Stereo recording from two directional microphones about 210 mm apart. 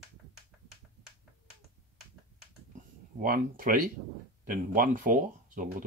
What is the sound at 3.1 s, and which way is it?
Speech, 40° right (ahead or behind).